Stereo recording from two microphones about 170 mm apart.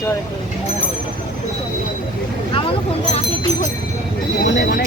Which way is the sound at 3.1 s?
40° left (ahead or behind).